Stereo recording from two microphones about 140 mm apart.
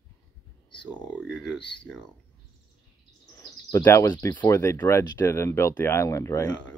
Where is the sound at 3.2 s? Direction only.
25° left (ahead or behind).